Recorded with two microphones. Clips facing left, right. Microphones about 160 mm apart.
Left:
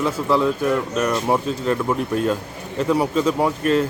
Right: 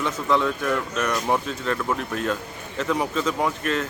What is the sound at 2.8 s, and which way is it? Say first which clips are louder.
Speech: left 5 dB; 10° left (ahead or behind).